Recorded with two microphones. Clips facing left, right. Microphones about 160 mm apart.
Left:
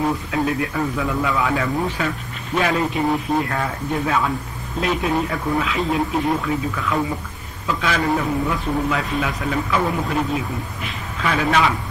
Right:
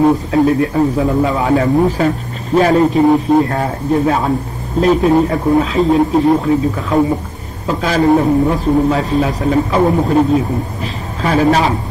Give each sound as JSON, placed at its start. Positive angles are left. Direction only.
{"t": 0.0, "sound": "speech", "side_deg": -35}